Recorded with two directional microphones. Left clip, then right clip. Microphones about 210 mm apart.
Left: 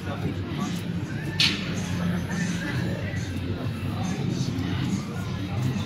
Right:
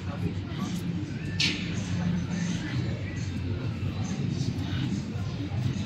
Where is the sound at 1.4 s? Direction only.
40° left (ahead or behind).